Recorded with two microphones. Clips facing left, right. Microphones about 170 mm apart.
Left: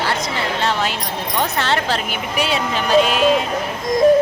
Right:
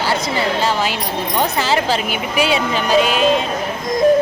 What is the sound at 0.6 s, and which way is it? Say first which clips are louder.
A woman's voice: right 2 dB; 5° right (ahead or behind).